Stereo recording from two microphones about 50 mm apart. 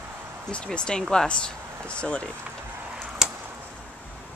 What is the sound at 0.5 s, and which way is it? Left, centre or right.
Speech, left.